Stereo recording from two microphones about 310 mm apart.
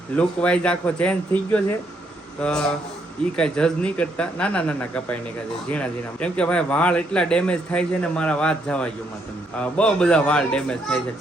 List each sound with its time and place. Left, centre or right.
0.2 s a man's voice: centre